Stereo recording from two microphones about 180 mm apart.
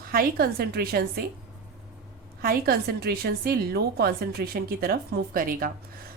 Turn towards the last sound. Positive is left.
turn(degrees=-50)  # may be behind; listen again after turning